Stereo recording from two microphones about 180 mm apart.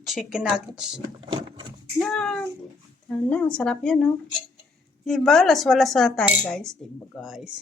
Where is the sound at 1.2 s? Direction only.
25° right (ahead or behind).